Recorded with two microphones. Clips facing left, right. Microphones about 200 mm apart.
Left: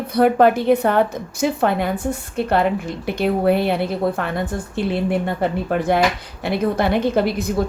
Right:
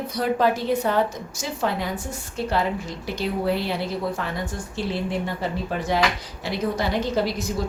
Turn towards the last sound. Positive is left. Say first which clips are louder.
# left 5 dB
turn(degrees=55)  # may be behind; listen again after turning